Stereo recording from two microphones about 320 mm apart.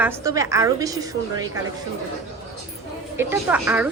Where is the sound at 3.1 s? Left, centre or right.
Centre.